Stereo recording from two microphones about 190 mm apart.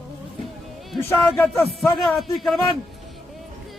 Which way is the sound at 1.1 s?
10° left (ahead or behind).